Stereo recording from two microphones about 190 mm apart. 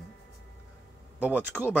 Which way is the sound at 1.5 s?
5° left (ahead or behind).